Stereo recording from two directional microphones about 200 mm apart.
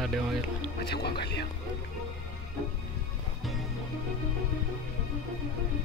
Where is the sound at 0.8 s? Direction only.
55° left (ahead or behind).